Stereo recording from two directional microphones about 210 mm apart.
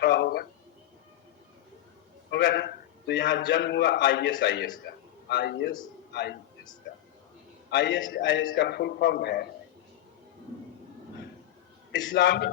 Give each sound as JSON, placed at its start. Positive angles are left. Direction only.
{"t": 0.0, "sound": "a sound", "side_deg": 50}
{"t": 2.3, "sound": "a man's voice", "side_deg": 50}
{"t": 7.7, "sound": "a man's voice", "side_deg": 55}
{"t": 11.9, "sound": "a man's voice", "side_deg": 55}